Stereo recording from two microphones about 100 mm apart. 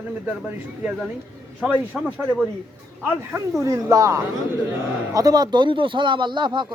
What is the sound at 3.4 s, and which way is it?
Speech, 30° right (ahead or behind).